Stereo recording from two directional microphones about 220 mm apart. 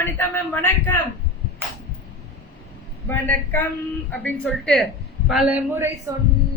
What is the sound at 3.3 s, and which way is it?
A man's voice, 10° left (ahead or behind).